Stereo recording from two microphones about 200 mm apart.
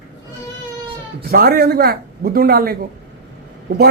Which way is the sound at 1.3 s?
50° right (ahead or behind).